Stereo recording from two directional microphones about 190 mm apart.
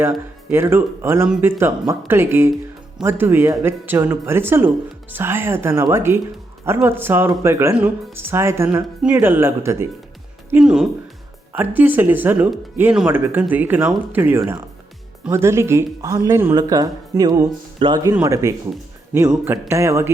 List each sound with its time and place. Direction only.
0.1 s speech: 10° right (ahead or behind)
18.1 s speech: 15° right (ahead or behind)